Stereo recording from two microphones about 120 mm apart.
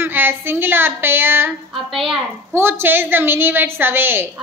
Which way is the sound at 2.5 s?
20° right (ahead or behind).